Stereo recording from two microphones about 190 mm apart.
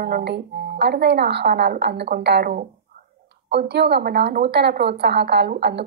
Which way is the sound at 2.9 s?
50° right (ahead or behind).